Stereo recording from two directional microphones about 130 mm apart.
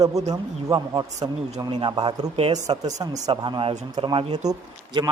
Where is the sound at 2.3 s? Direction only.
50° right (ahead or behind).